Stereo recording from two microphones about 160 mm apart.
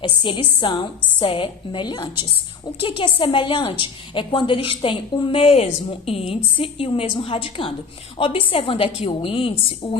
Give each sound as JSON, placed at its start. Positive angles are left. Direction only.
{"t": 0.2, "sound": "a woman's voice", "side_deg": 30}